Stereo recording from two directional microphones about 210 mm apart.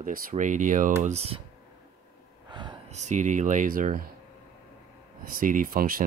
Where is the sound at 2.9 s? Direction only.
35° right (ahead or behind).